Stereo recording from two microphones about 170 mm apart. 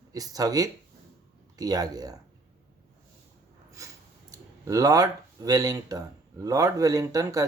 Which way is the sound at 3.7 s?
20° right (ahead or behind).